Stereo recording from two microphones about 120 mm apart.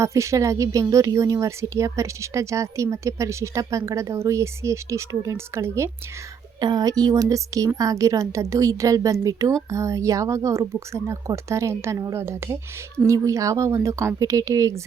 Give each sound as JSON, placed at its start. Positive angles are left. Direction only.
{"t": 0.0, "sound": "a woman's voice", "side_deg": -25}
{"t": 6.6, "sound": "a woman's voice", "side_deg": -35}